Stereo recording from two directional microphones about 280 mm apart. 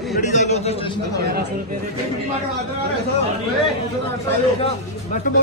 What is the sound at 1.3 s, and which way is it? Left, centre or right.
Speech, right.